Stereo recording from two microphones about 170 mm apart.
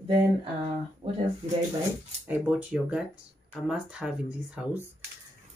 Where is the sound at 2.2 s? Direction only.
10° right (ahead or behind).